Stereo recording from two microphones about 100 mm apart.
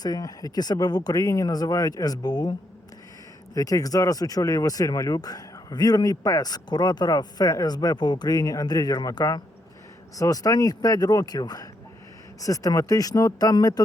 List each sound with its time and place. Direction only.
0.0 s speech: 40° left (ahead or behind)